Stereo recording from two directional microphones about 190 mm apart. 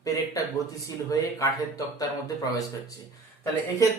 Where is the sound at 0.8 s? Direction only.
15° left (ahead or behind).